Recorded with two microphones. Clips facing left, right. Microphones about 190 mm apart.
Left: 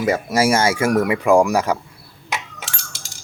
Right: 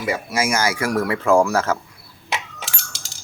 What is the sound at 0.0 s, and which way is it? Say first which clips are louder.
Speech: left 5 dB; 45° left (ahead or behind).